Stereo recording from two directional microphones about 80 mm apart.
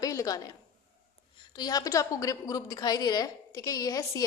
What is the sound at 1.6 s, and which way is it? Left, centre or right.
A woman's voice, left.